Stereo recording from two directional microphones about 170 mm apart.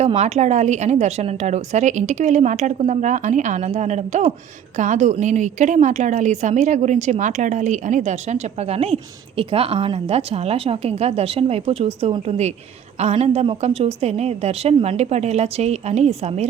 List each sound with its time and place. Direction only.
0.0 s a woman's voice: 40° right (ahead or behind)